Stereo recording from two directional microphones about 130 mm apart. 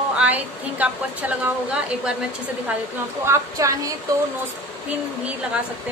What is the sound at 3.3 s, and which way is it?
Speech, 25° right (ahead or behind).